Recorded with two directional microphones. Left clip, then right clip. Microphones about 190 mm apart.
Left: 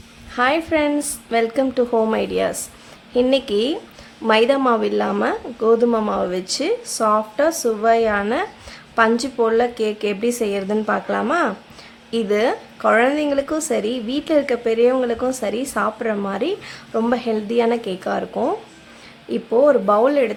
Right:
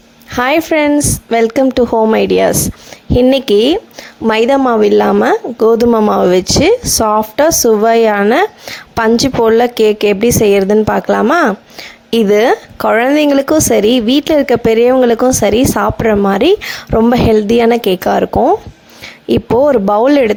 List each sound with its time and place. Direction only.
0.3 s speech: 45° right (ahead or behind)